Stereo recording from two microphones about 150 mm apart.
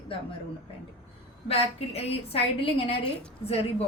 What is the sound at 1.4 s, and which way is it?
A woman's voice, 40° left (ahead or behind).